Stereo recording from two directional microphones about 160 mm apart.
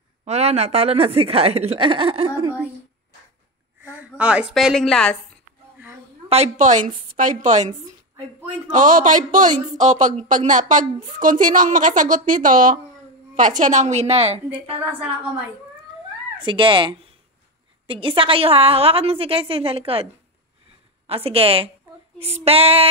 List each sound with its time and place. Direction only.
0.2 s speech: 45° right (ahead or behind)
3.8 s a woman's voice: 10° right (ahead or behind)
6.2 s a woman's voice: 40° right (ahead or behind)
8.7 s a woman's voice: 55° right (ahead or behind)
16.3 s speech: 30° right (ahead or behind)
21.1 s speech: 35° right (ahead or behind)